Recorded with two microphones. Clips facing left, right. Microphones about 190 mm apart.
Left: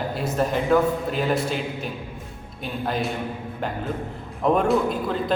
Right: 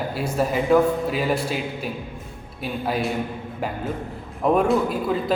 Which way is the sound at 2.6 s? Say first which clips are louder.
Right 1 dB; 5° right (ahead or behind).